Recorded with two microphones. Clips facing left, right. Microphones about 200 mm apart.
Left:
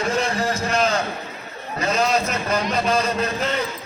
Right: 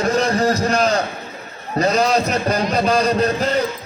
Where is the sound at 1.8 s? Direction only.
35° right (ahead or behind).